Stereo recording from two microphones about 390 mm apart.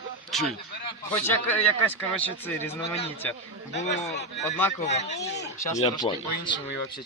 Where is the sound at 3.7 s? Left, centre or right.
Left.